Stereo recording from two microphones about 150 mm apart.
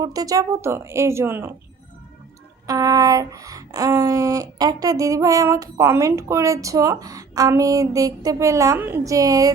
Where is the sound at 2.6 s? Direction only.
25° right (ahead or behind).